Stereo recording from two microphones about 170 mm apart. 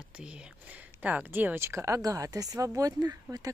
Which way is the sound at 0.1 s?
5° right (ahead or behind).